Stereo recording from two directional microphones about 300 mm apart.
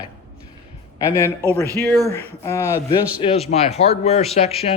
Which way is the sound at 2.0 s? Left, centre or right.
Centre.